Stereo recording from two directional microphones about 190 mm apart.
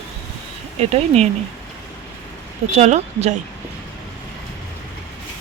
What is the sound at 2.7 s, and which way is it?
Speech, 35° right (ahead or behind).